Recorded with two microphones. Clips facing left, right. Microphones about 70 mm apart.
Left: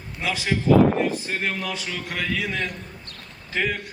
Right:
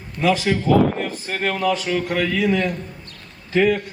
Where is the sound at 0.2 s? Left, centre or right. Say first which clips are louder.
Right 7 dB; right.